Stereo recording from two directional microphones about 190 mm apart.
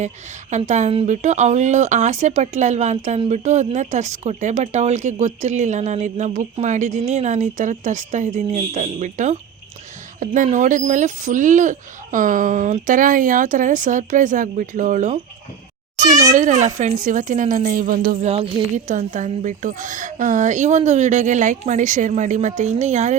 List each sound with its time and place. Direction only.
0.7 s speech: 35° right (ahead or behind)
16.0 s a child's voice: 20° right (ahead or behind)
16.3 s speech: 40° right (ahead or behind)
18.3 s speech: 30° right (ahead or behind)